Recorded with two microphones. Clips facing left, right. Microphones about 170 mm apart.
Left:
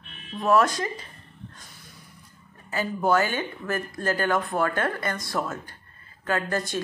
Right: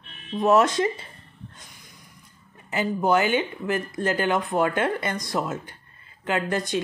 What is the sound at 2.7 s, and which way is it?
Speech, 20° right (ahead or behind).